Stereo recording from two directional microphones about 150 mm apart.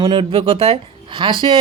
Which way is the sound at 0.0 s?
35° right (ahead or behind).